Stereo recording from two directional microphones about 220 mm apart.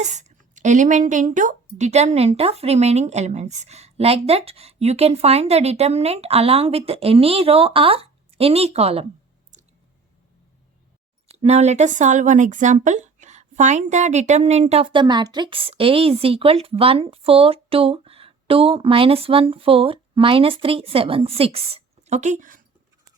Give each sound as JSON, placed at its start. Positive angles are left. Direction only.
{"t": 0.0, "sound": "speech", "side_deg": -35}
{"t": 11.3, "sound": "speech", "side_deg": -30}